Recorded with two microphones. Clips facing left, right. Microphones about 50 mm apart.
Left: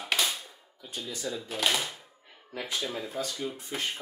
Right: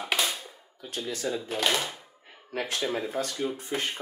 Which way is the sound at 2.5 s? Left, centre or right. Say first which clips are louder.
Right 5 dB; right.